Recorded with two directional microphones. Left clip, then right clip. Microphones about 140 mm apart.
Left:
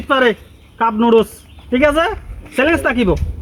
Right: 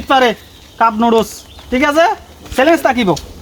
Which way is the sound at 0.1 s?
30° right (ahead or behind).